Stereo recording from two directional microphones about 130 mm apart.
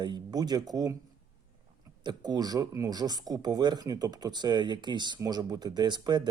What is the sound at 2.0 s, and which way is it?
Speech, 30° right (ahead or behind).